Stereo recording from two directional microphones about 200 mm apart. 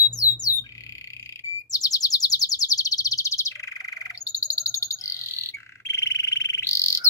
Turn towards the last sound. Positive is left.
turn(degrees=15)  # may be behind; listen again after turning